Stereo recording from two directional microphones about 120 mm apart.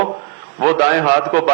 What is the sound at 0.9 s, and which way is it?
Speech, 25° right (ahead or behind).